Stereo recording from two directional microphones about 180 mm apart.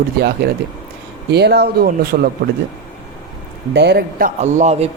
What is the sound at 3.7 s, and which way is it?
Speech, 70° right (ahead or behind).